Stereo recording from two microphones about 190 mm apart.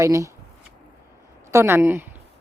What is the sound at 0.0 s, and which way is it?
Speech, 15° right (ahead or behind).